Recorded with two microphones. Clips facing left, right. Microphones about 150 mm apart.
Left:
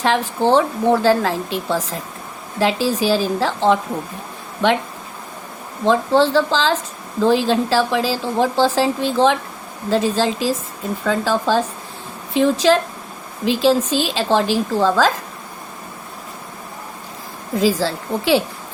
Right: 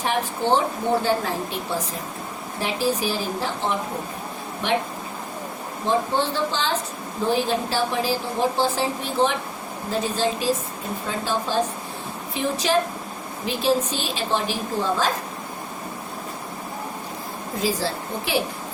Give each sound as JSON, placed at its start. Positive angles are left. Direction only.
{"t": 0.0, "sound": "speech", "side_deg": 90}
{"t": 5.8, "sound": "speech", "side_deg": 90}
{"t": 17.6, "sound": "speech", "side_deg": 90}